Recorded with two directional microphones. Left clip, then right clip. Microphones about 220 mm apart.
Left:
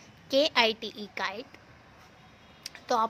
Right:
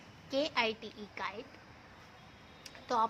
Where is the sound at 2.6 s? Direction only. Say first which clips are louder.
Left 5 dB; 40° left (ahead or behind).